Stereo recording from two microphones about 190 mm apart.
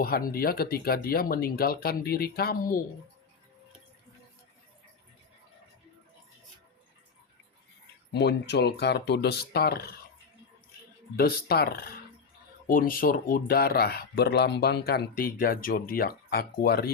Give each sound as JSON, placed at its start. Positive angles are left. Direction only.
{"t": 0.0, "sound": "speech", "side_deg": 50}
{"t": 8.1, "sound": "speech", "side_deg": 60}
{"t": 11.2, "sound": "speech", "side_deg": 55}